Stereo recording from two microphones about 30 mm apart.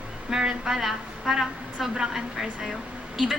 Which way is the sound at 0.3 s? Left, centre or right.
Right.